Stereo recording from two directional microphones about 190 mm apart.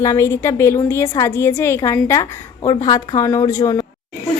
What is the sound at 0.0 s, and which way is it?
A woman's voice, 15° left (ahead or behind).